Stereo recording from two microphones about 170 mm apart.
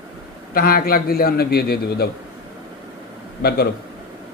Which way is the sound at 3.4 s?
70° left (ahead or behind).